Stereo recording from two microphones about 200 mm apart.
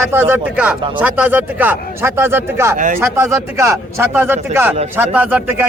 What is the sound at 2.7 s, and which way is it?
Speech, 40° right (ahead or behind).